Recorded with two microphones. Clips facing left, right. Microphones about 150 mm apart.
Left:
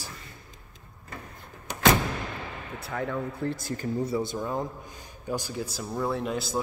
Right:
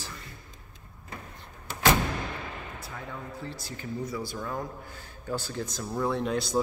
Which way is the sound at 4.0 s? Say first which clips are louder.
Left 4 dB; 25° left (ahead or behind).